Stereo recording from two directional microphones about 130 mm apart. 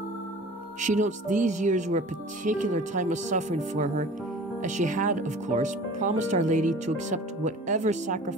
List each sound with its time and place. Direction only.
0.7 s speech: 70° right (ahead or behind)